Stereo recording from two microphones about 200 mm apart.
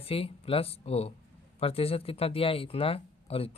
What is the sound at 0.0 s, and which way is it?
Speech, 30° left (ahead or behind).